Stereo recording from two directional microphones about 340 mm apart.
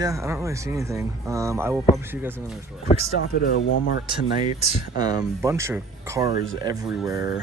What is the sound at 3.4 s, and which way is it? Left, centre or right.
Speech, left.